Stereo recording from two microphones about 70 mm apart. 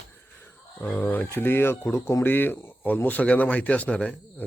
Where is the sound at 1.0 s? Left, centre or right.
Left.